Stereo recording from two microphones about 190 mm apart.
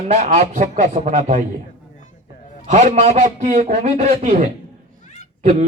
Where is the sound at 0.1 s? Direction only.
40° right (ahead or behind).